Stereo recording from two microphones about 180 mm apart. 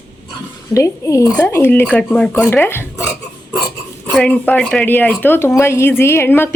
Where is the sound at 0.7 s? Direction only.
15° left (ahead or behind).